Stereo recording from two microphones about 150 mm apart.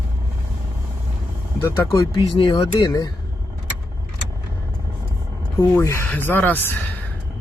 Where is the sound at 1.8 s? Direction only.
20° left (ahead or behind).